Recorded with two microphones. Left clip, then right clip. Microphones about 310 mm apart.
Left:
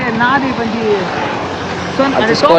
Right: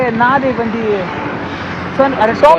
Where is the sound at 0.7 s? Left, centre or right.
Left.